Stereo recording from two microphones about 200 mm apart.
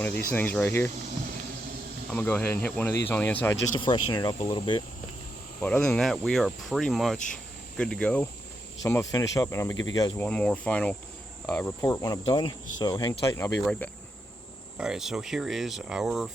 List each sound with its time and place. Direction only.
0.3 s speech: 10° left (ahead or behind)
2.0 s speech: 10° left (ahead or behind)
3.8 s speech: 25° left (ahead or behind)
5.6 s speech: 5° left (ahead or behind)
13.7 s speech: 5° left (ahead or behind)